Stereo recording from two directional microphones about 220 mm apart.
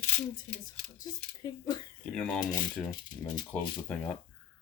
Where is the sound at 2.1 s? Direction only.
5° left (ahead or behind).